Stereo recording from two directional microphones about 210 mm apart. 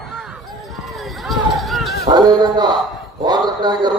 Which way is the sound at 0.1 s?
Centre (ahead or behind).